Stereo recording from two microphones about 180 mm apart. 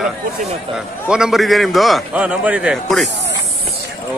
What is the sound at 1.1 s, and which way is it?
A man's voice, 5° right (ahead or behind).